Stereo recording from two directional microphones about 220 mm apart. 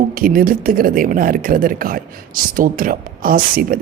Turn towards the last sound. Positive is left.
turn(degrees=-40)  # may be behind; listen again after turning